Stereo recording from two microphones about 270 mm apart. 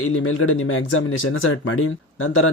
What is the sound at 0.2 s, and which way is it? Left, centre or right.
Speech, left.